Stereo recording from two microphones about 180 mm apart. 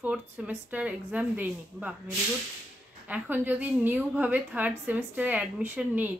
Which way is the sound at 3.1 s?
10° right (ahead or behind).